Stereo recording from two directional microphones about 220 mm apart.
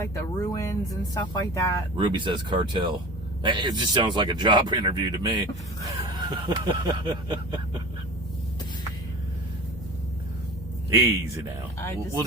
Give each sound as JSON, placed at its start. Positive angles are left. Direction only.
{"t": 0.1, "sound": "speech", "side_deg": 15}
{"t": 2.0, "sound": "speech", "side_deg": -20}
{"t": 11.8, "sound": "speech", "side_deg": 10}